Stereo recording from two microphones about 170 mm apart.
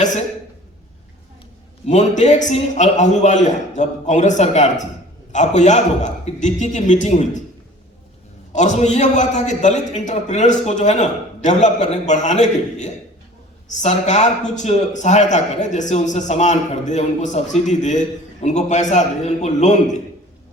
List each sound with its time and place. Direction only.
1.9 s a man's voice: 45° left (ahead or behind)
8.5 s a man's voice: 45° left (ahead or behind)